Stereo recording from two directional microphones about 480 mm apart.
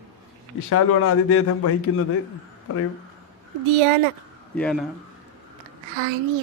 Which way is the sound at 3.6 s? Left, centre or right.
Right.